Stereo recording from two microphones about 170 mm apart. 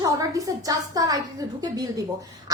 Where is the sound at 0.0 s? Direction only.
20° right (ahead or behind).